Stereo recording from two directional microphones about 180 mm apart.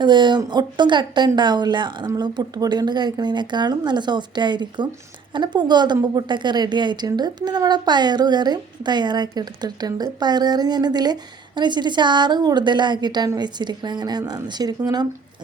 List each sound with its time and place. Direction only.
0.0 s a woman's voice: 25° right (ahead or behind)